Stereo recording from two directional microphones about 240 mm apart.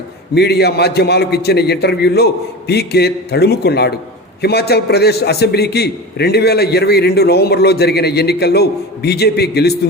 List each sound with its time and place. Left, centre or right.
0.3 s a man's voice: left